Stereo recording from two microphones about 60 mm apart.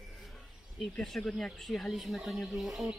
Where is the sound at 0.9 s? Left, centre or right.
Centre.